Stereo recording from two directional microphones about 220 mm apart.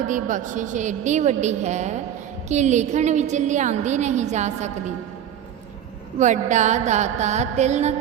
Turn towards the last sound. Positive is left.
turn(degrees=-30)  # may be behind; listen again after turning